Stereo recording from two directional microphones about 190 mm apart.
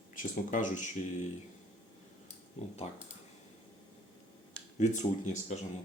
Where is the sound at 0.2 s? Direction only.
40° left (ahead or behind).